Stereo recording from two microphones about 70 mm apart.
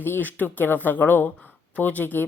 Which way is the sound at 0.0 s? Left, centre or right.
Left.